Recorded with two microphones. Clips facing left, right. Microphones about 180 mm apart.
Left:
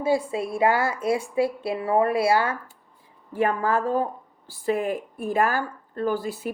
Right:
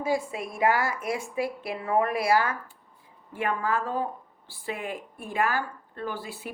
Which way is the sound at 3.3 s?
40° left (ahead or behind).